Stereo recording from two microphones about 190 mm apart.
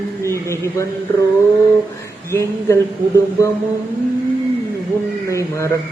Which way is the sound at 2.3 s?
15° left (ahead or behind).